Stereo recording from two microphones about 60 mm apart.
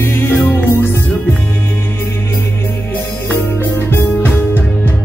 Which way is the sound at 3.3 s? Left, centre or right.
Left.